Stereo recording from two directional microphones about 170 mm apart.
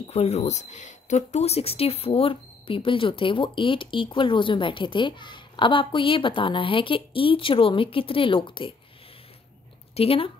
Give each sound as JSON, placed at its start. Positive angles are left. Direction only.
{"t": 0.0, "sound": "speech", "side_deg": 35}
{"t": 9.9, "sound": "speech", "side_deg": 35}